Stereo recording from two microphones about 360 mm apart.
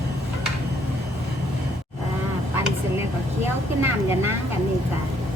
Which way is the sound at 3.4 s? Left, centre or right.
Centre.